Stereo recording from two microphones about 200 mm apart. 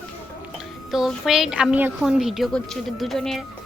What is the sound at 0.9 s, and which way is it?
A woman's voice, centre (ahead or behind).